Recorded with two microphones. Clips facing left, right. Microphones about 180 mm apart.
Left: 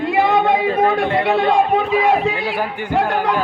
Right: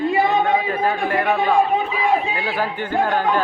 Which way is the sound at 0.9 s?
80° left.